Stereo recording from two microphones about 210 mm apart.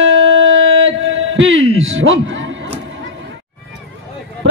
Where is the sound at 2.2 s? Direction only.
65° right (ahead or behind).